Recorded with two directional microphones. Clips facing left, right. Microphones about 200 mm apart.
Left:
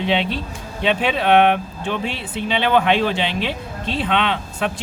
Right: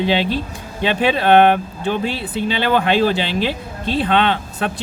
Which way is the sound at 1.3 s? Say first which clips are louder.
Right 2 dB; 40° right (ahead or behind).